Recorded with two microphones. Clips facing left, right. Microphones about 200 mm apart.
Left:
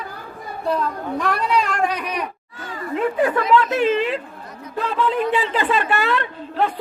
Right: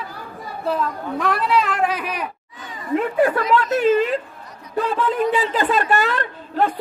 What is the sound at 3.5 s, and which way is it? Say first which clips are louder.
A woman's voice: right 2 dB; 45° right (ahead or behind).